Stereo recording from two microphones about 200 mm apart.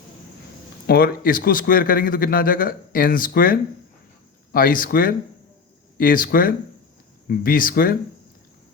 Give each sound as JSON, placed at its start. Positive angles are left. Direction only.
{"t": 0.9, "sound": "a man's voice", "side_deg": 50}